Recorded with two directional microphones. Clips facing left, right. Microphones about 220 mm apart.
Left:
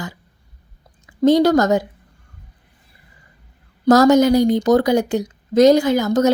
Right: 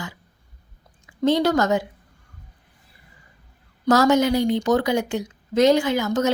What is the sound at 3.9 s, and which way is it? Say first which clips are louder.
A woman's voice: left 6 dB; 40° left (ahead or behind).